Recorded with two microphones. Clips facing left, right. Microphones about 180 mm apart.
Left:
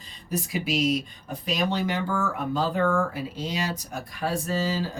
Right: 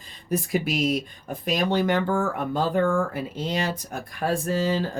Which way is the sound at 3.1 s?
55° right (ahead or behind).